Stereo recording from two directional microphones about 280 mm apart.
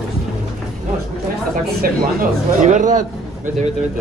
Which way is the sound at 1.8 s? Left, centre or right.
Right.